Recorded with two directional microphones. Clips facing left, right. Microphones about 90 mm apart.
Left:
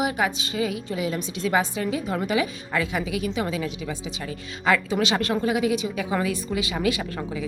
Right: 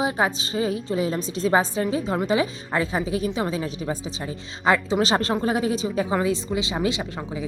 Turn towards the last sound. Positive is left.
turn(degrees=-25)  # may be behind; listen again after turning